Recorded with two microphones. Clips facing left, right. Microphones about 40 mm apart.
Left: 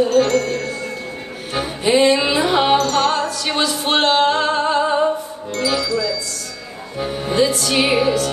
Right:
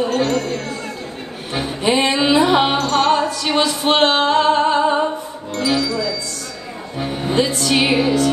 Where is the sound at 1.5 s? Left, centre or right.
Right.